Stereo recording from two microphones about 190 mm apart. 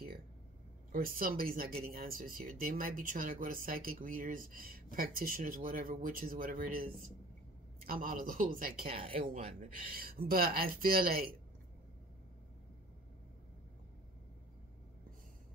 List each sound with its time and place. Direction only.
0.9 s speech: 50° right (ahead or behind)
8.9 s speech: 30° right (ahead or behind); by 11.2 s 50° right (ahead or behind)